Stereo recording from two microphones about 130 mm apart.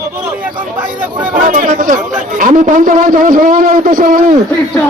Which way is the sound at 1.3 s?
80° right.